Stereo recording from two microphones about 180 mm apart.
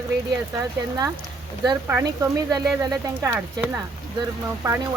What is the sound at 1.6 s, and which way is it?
Speech, 15° right (ahead or behind).